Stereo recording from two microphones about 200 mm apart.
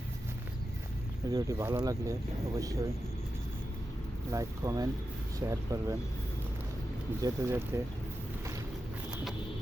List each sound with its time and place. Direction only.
1.3 s speech: 15° right (ahead or behind)
4.3 s speech: 15° right (ahead or behind)
7.2 s speech: 15° right (ahead or behind)